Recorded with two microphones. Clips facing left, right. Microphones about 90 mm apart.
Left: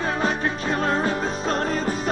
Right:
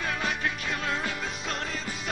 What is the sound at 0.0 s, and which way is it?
Music, 35° left (ahead or behind).